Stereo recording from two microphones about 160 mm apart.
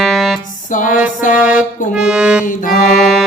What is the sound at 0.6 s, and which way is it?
Music, 55° left (ahead or behind).